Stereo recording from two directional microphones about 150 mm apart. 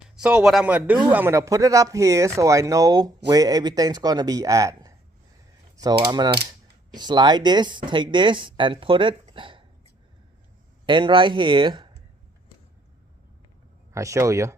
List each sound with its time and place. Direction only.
0.2 s speech: 5° right (ahead or behind); by 9.6 s 35° right (ahead or behind)
10.8 s speech: 30° right (ahead or behind)
13.9 s speech: 20° right (ahead or behind)